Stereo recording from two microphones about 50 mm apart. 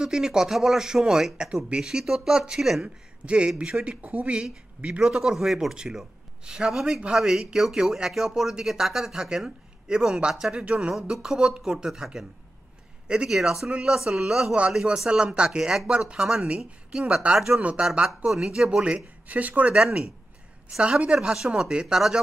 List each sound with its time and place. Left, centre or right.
0.0 s speech: centre
3.9 s speech: right
13.3 s speech: centre
13.7 s speech: right
13.9 s speech: centre
18.3 s speech: centre
19.2 s speech: right
19.7 s speech: centre